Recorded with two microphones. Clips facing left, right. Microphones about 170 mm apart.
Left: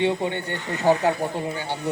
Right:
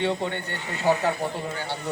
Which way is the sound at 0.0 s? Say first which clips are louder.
Left 3 dB; 15° left (ahead or behind).